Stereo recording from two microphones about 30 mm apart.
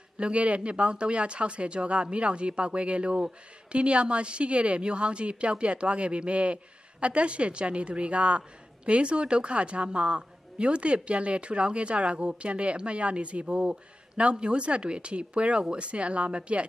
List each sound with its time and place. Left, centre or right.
0.2 s a woman's voice: right